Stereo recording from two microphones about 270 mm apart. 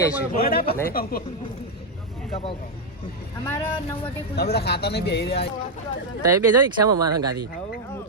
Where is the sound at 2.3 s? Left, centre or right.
Left.